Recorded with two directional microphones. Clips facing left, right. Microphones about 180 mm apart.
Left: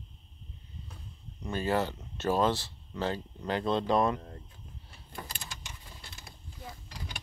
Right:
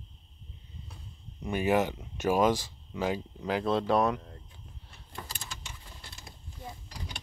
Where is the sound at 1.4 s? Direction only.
15° right (ahead or behind).